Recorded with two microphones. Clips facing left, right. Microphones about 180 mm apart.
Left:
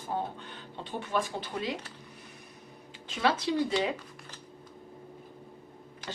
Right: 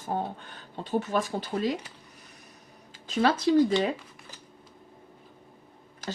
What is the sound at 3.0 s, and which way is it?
Speech, 45° right (ahead or behind).